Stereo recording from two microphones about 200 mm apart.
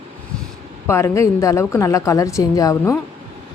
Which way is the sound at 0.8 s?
15° left (ahead or behind).